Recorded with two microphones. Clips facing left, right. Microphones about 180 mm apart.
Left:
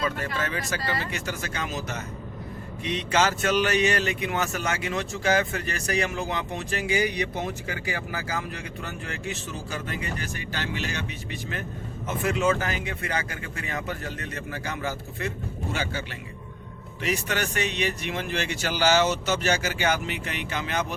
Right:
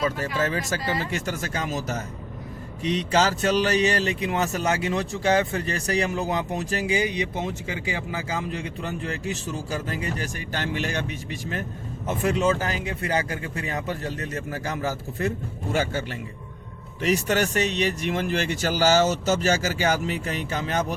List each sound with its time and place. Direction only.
0.4 s speech: 40° right (ahead or behind)
0.8 s speech: 15° right (ahead or behind)
1.1 s speech: 45° right (ahead or behind)
12.0 s speech: 35° right (ahead or behind)